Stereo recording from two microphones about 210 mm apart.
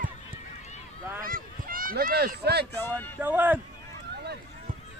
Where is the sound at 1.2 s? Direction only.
40° right (ahead or behind).